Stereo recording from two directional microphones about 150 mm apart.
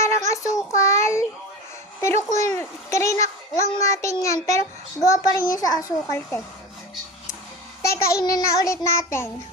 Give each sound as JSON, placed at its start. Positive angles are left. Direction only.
{"t": 0.3, "sound": "child singing", "side_deg": 20}
{"t": 2.0, "sound": "a child's voice", "side_deg": 20}
{"t": 7.8, "sound": "a child's voice", "side_deg": 20}